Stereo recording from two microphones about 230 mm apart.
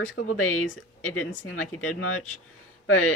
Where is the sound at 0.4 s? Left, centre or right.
Left.